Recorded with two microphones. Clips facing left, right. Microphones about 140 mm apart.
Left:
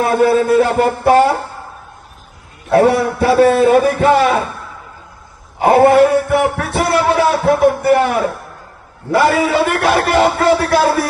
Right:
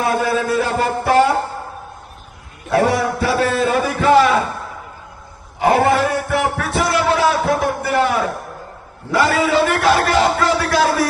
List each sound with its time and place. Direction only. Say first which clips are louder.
0.0 s a man's voice: left 6 dB; 60° left (ahead or behind)
2.6 s a man's voice: left 5 dB; 55° left (ahead or behind)
5.5 s a man's voice: left 6 dB; 55° left (ahead or behind)
6.7 s a sound: left 3 dB; 55° left (ahead or behind)
9.1 s a man's voice: left 3 dB; 60° left (ahead or behind)